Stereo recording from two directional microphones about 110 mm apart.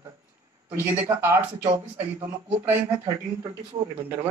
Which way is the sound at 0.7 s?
20° right (ahead or behind).